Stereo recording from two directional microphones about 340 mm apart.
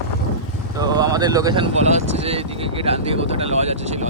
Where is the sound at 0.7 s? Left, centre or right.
Centre.